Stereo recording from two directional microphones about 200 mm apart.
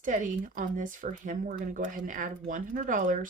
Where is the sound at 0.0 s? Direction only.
40° right (ahead or behind).